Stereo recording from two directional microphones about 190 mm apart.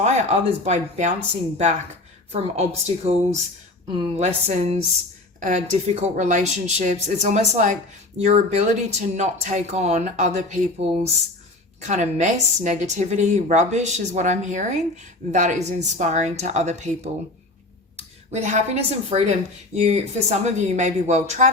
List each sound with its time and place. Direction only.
0.0 s speech: 35° right (ahead or behind)
2.3 s speech: 30° right (ahead or behind)
18.3 s speech: 35° right (ahead or behind)